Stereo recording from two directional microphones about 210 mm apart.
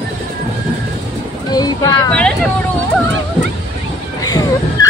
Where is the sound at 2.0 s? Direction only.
5° left (ahead or behind).